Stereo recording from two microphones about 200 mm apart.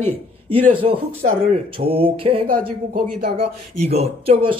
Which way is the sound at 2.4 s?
45° right (ahead or behind).